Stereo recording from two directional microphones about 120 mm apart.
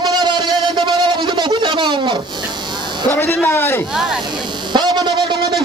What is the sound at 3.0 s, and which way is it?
Speech, 20° left (ahead or behind).